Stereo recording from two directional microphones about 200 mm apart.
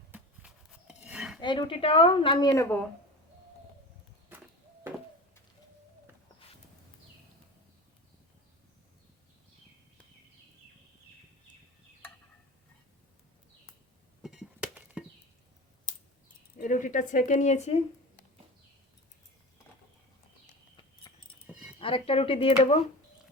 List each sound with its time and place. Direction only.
0.1 s cutlery: 5° right (ahead or behind)
1.4 s a woman's voice: 25° left (ahead or behind)
4.3 s a sound: 10° right (ahead or behind)
14.2 s a sound: centre (ahead or behind)
16.6 s speech: 40° left (ahead or behind)
21.1 s horse: 20° left (ahead or behind)
21.4 s dog: centre (ahead or behind)
21.8 s a woman's voice: 25° left (ahead or behind)